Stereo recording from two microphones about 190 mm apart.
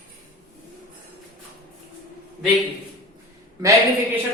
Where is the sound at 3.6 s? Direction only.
15° right (ahead or behind).